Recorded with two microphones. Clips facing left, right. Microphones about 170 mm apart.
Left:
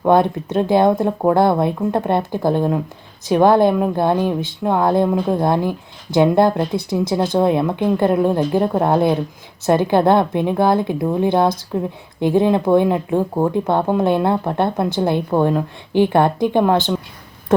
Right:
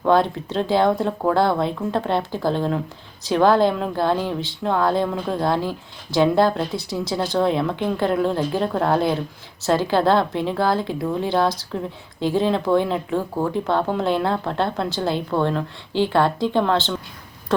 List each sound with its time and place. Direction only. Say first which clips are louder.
0.0 s speech: left 3 dB; 20° left (ahead or behind)